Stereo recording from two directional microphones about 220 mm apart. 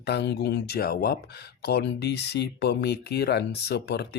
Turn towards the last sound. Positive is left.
turn(degrees=50)  # may be behind; listen again after turning